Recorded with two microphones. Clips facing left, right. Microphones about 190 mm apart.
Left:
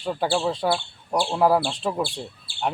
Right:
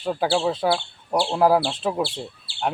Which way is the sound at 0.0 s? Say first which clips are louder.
Right 2 dB; 5° right (ahead or behind).